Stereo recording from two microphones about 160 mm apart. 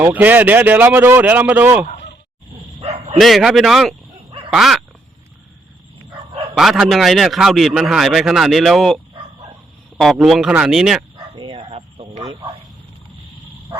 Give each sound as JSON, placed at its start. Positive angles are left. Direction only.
{"t": 0.0, "sound": "speech", "side_deg": -10}
{"t": 2.8, "sound": "bow-wow", "side_deg": -40}
{"t": 3.2, "sound": "a man's voice", "side_deg": 0}
{"t": 4.3, "sound": "dog", "side_deg": -30}
{"t": 4.5, "sound": "a man's voice", "side_deg": 0}
{"t": 6.5, "sound": "a man's voice", "side_deg": -5}
{"t": 10.0, "sound": "a man's voice", "side_deg": 0}
{"t": 11.3, "sound": "bow-wow", "side_deg": -30}
{"t": 11.7, "sound": "a sound", "side_deg": -40}